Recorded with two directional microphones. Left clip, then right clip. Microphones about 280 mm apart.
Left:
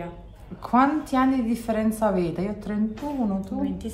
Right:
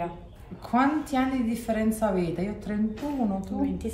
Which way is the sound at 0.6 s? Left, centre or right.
Centre.